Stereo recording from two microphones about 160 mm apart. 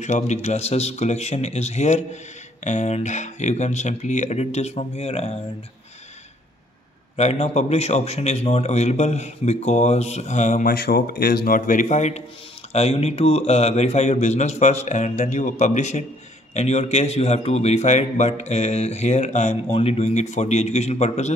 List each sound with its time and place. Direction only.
0.0 s a man's voice: 45° left (ahead or behind)
7.2 s a man's voice: 45° left (ahead or behind)
10.7 s a man's voice: 75° left (ahead or behind); by 21.3 s 45° left (ahead or behind)